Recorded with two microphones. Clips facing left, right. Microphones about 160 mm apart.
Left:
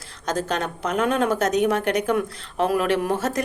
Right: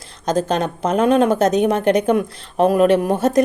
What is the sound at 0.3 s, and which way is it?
Speech, 20° right (ahead or behind).